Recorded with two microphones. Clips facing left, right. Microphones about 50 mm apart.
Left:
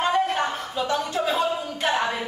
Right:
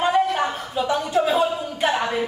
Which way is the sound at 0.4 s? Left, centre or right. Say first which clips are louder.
Right 2 dB; centre.